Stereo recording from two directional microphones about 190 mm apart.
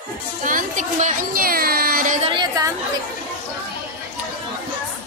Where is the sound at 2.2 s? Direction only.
25° right (ahead or behind).